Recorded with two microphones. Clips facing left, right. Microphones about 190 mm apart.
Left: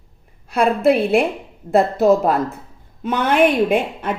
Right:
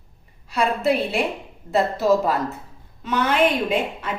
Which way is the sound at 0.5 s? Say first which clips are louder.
Left 5 dB; 55° left (ahead or behind).